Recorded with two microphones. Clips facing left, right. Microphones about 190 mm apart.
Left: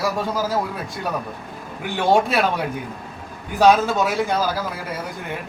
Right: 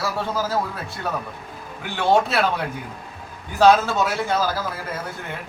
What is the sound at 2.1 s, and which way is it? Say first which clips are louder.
A man's voice: left 1 dB; 15° left (ahead or behind).